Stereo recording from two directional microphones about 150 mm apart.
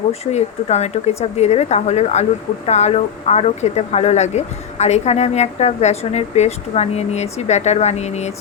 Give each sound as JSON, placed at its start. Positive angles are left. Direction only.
{"t": 0.1, "sound": "speech", "side_deg": 45}